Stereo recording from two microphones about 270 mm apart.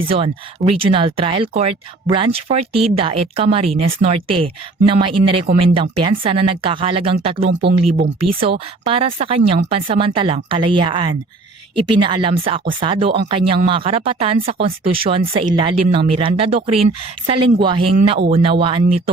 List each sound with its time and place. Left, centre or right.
0.1 s a woman's voice: right